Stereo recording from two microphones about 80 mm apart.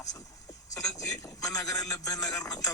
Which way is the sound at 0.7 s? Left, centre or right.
Left.